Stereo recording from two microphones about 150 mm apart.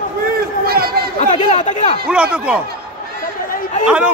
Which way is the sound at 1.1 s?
50° left (ahead or behind).